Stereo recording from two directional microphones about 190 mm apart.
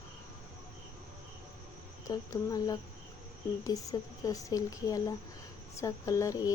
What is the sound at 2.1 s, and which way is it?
Speech, 20° left (ahead or behind).